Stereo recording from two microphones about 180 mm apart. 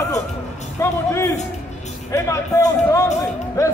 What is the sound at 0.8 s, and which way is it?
Speech, 15° left (ahead or behind).